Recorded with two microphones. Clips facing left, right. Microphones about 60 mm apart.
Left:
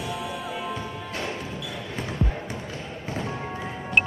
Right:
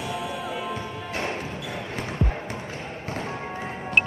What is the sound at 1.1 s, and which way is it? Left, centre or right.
Basketball bounce, right.